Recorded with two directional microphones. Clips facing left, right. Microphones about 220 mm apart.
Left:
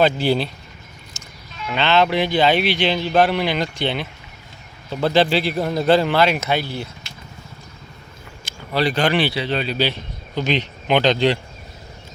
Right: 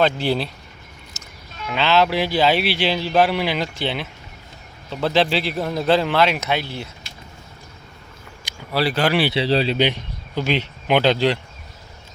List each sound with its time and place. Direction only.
0.0 s speech: centre (ahead or behind)
1.2 s music: 5° right (ahead or behind)
1.6 s speech: 5° right (ahead or behind)
8.4 s speech: 5° right (ahead or behind)
9.3 s speech: 30° right (ahead or behind)
9.7 s speech: 15° right (ahead or behind)